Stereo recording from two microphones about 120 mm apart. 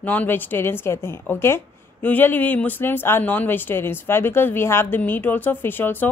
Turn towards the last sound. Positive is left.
turn(degrees=15)  # may be behind; listen again after turning